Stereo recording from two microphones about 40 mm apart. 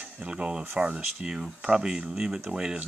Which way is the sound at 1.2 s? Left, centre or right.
Centre.